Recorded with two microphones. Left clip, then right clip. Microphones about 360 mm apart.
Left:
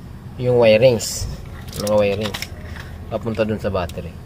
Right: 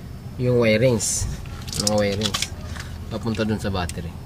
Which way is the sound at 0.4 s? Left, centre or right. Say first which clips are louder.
Left 6 dB; left.